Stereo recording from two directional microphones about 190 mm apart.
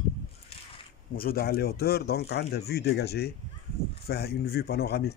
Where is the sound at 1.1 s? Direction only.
50° left (ahead or behind).